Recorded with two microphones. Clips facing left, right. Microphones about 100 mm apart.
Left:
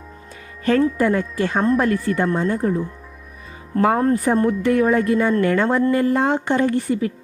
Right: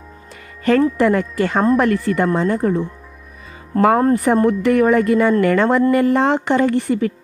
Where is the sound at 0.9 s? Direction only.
80° right.